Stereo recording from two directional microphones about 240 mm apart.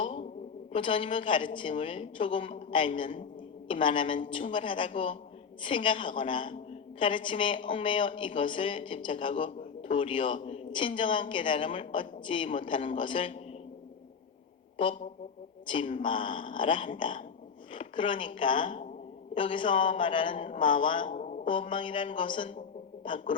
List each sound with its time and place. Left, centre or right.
0.0 s a sound: left
0.7 s speech: left
14.8 s speech: left
17.7 s a sound: left
18.3 s speech: left
21.1 s speech: left